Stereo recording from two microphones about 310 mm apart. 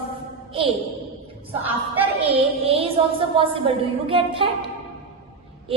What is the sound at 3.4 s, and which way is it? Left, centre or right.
A woman's voice, centre.